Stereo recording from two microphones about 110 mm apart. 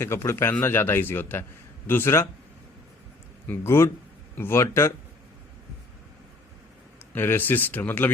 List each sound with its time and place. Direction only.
0.0 s speech: 25° left (ahead or behind)
3.4 s speech: 20° left (ahead or behind)
7.1 s speech: 20° left (ahead or behind)